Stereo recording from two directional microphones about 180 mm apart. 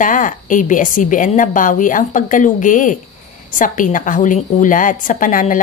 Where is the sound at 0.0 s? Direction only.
45° left (ahead or behind).